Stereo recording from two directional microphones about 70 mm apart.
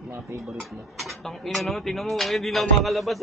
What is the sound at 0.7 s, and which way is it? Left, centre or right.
Speech, centre.